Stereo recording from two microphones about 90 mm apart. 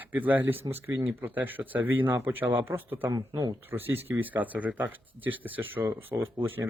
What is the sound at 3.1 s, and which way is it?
Speech, 45° right (ahead or behind).